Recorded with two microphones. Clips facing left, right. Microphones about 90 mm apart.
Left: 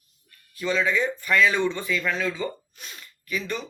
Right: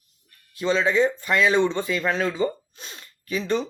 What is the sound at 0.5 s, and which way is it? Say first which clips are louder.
Speech: right 3 dB; 30° right (ahead or behind).